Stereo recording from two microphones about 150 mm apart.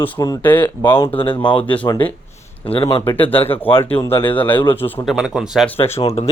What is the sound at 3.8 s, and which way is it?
Speech, 15° left (ahead or behind).